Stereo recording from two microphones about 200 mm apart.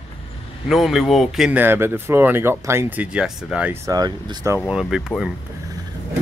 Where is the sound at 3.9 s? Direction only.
20° right (ahead or behind).